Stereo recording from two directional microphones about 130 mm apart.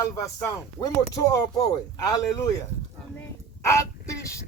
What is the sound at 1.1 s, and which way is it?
Female singing, 25° left (ahead or behind).